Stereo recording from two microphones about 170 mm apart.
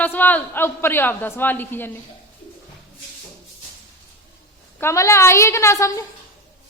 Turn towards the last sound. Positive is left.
turn(degrees=20)  # may be behind; listen again after turning